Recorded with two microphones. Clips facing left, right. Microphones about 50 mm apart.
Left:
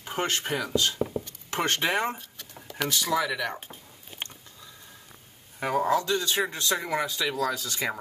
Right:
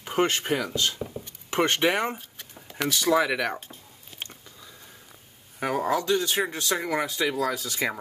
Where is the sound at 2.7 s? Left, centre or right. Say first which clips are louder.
Even; centre.